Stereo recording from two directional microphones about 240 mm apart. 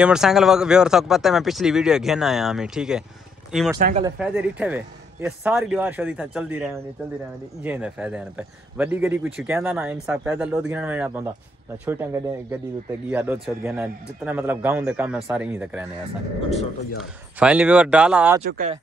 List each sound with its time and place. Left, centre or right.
0.0 s speech: centre
3.7 s speech: right
4.2 s a man's voice: centre
17.0 s speech: centre
18.5 s speech: right